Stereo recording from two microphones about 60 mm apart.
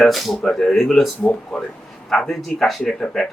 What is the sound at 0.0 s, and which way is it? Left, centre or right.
Speech, centre.